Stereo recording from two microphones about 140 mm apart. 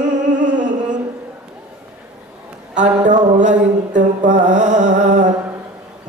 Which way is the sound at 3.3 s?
60° right (ahead or behind).